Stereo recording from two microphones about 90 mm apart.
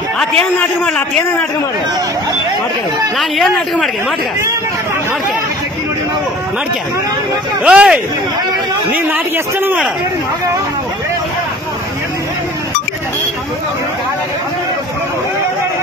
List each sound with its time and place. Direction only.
0.4 s a man's voice: 20° left (ahead or behind)
3.2 s speech: centre (ahead or behind)
7.6 s speech: 10° right (ahead or behind)
9.1 s a man's voice: 25° right (ahead or behind)